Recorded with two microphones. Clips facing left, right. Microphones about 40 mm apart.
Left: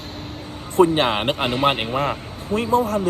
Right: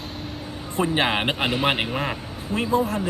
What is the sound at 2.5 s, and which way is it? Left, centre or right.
Speech, right.